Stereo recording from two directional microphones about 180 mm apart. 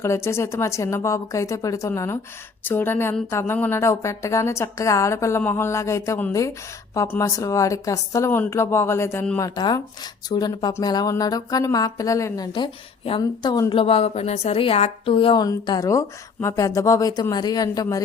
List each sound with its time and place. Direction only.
0.0 s speech: 15° left (ahead or behind)
9.6 s speech: 20° left (ahead or behind)